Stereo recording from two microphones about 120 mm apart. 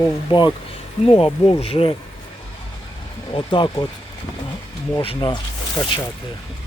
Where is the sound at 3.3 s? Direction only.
40° left (ahead or behind).